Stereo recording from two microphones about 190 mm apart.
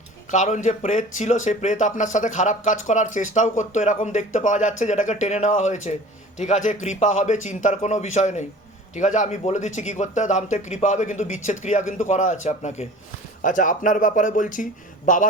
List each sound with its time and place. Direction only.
0.3 s speech: 40° left (ahead or behind)